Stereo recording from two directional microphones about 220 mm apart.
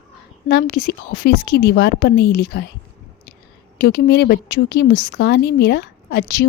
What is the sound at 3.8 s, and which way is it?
Speech, 45° left (ahead or behind).